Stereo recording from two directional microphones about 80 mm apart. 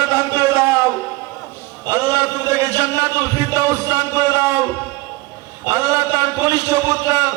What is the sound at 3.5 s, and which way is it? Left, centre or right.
A man's voice, right.